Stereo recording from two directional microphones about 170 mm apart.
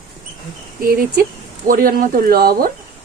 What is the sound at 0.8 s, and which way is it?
Speech, 60° right (ahead or behind).